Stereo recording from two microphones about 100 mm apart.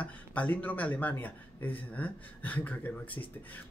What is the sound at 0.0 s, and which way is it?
Speech, 15° left (ahead or behind).